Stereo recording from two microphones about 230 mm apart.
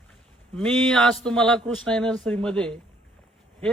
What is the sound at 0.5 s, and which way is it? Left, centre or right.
A man's voice, centre.